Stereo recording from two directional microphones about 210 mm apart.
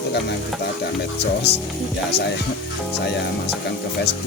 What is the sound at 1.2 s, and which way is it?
Speech, 50° left (ahead or behind).